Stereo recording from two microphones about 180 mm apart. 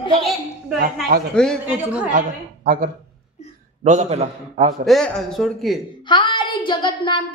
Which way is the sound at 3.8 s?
40° right (ahead or behind).